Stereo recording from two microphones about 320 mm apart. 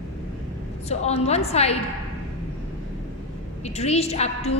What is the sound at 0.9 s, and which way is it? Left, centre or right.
Speech, centre.